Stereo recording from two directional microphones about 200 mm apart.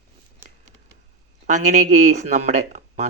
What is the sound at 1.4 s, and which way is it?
Speech, 35° right (ahead or behind).